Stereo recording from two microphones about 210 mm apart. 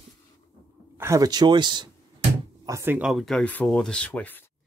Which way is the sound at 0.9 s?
15° right (ahead or behind).